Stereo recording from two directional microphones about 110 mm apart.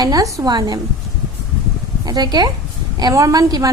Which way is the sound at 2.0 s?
40° right (ahead or behind).